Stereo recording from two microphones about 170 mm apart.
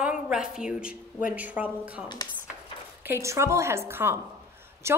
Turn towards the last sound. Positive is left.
turn(degrees=-15)  # may be behind; listen again after turning